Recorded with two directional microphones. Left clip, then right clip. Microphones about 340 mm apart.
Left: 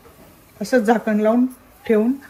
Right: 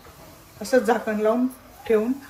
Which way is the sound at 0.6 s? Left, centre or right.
Left.